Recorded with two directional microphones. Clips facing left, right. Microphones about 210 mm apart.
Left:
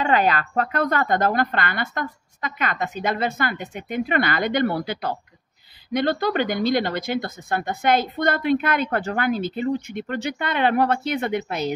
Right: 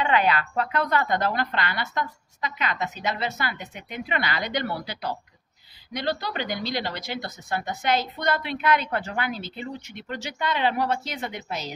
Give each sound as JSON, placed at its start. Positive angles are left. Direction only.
{"t": 0.0, "sound": "speech", "side_deg": 45}